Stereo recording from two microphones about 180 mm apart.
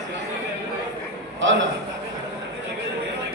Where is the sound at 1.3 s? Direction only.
90° right.